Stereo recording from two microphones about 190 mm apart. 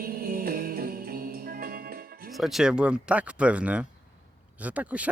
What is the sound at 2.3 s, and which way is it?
Speech, centre (ahead or behind).